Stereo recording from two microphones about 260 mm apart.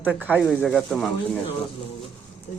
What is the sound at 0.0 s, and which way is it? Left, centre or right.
Speech, centre.